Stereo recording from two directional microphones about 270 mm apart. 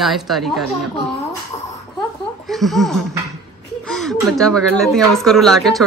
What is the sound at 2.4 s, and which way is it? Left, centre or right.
Speech, centre.